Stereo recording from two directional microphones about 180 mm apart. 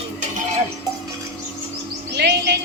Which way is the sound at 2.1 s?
65° right (ahead or behind).